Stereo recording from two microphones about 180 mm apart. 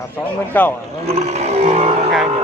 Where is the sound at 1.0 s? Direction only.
35° right (ahead or behind).